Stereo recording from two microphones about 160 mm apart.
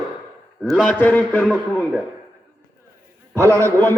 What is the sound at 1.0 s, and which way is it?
Speech, 10° left (ahead or behind).